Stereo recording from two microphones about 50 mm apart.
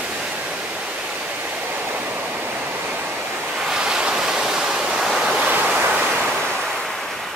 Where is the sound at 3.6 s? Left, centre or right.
Centre.